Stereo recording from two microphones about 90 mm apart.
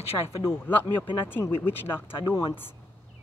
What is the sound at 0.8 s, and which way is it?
Speech, 65° left (ahead or behind).